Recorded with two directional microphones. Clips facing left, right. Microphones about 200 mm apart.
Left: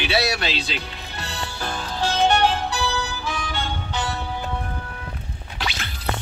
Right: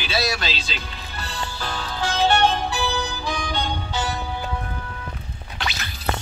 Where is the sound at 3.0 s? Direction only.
15° right (ahead or behind).